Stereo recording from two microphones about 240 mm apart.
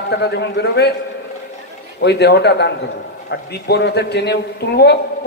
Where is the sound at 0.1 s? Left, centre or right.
Left.